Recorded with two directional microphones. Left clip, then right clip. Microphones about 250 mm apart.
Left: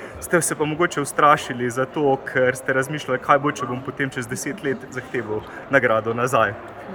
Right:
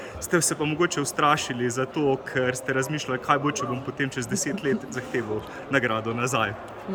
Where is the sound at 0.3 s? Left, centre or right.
Centre.